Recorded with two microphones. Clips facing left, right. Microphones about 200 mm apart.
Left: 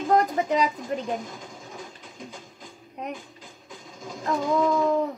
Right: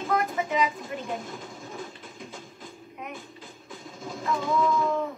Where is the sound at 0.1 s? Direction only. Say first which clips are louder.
Left 5 dB; 35° left (ahead or behind).